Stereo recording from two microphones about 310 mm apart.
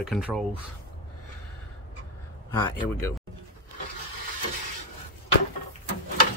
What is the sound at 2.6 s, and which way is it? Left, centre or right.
Speech, centre.